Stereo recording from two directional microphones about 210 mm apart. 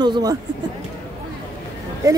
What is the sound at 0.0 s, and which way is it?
Speech, 20° right (ahead or behind).